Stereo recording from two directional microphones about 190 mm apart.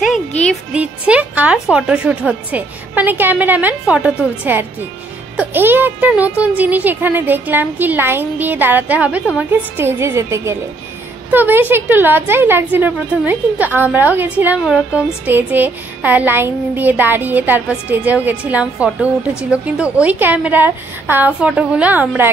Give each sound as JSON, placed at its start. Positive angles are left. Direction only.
{"t": 0.7, "sound": "a woman's voice", "side_deg": -5}